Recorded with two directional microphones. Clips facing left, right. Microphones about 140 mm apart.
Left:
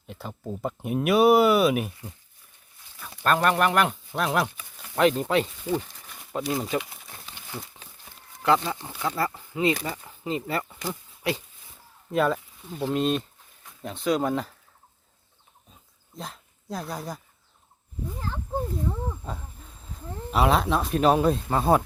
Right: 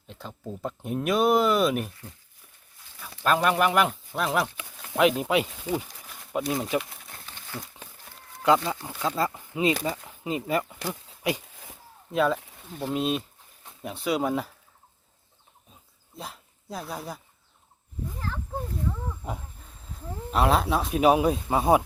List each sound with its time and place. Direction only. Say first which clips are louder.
0.1 s speech: left 3 dB; 10° left (ahead or behind)
3.0 s speech: left 1 dB; centre (ahead or behind)
7.5 s speech: even; 15° left (ahead or behind)
8.4 s speech: right 1 dB; 15° right (ahead or behind)
11.2 s a sound: even; 15° right (ahead or behind)
12.1 s speech: even; centre (ahead or behind)
16.1 s speech: left 1 dB; 5° right (ahead or behind)
19.5 s speech: left 1 dB; centre (ahead or behind)